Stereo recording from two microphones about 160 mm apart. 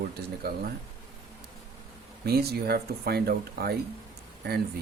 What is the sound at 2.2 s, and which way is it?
Speech, 80° right.